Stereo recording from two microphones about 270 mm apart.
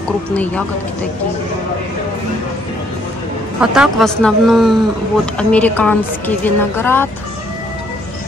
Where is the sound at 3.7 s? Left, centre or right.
Centre.